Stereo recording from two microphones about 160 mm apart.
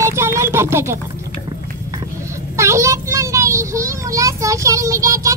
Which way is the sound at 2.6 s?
20° right (ahead or behind).